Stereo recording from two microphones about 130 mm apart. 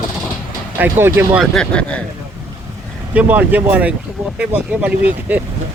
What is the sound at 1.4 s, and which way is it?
Speech, 5° left (ahead or behind).